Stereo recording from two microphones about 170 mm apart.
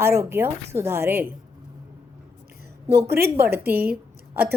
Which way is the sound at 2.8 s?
70° right (ahead or behind).